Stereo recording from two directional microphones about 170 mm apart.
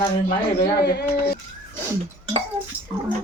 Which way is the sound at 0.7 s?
70° left (ahead or behind).